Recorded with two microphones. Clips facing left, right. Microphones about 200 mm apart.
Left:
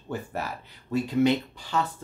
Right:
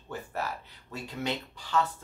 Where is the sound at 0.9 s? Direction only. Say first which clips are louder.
Left 12 dB; 15° left (ahead or behind).